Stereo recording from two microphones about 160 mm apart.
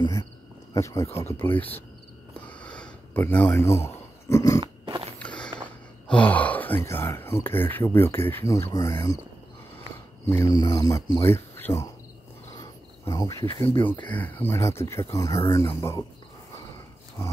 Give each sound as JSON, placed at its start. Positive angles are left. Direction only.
{"t": 0.7, "sound": "speech", "side_deg": 20}
{"t": 2.4, "sound": "a sound", "side_deg": 5}
{"t": 3.5, "sound": "speech", "side_deg": 15}
{"t": 4.6, "sound": "biting", "side_deg": -30}
{"t": 5.2, "sound": "walk", "side_deg": 5}
{"t": 6.0, "sound": "speech", "side_deg": 10}
{"t": 10.2, "sound": "speech", "side_deg": 20}
{"t": 12.5, "sound": "cricket", "side_deg": 25}
{"t": 14.0, "sound": "speech", "side_deg": 10}